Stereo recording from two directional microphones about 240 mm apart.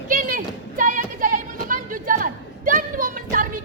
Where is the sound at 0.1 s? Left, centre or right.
Right.